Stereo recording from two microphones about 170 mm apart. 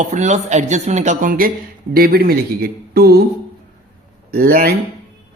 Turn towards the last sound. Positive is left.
turn(degrees=-60)  # may be behind; listen again after turning